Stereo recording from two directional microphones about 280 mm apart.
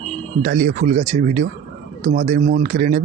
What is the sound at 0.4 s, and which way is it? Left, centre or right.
Speech, right.